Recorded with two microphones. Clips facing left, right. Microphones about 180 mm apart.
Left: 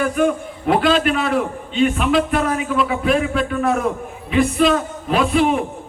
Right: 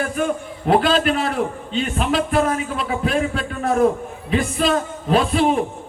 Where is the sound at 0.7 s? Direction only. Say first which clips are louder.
Left 1 dB; 35° right (ahead or behind).